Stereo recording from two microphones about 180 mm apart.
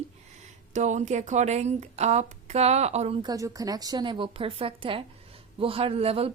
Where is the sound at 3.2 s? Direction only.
20° right (ahead or behind).